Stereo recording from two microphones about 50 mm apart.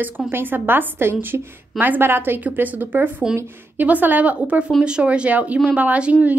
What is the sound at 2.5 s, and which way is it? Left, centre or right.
A woman's voice, right.